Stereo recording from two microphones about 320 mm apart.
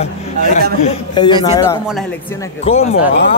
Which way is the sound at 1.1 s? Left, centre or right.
Centre.